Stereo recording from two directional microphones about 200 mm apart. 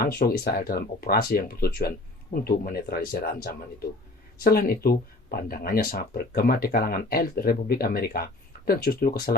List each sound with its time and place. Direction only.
0.0 s speech: 50° left (ahead or behind)